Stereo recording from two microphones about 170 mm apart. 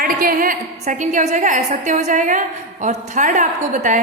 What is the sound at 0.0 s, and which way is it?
A woman's voice, 55° right (ahead or behind).